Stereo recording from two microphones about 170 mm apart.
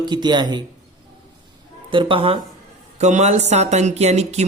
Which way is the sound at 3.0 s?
45° right (ahead or behind).